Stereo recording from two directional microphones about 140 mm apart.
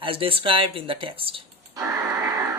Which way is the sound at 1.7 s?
25° right (ahead or behind).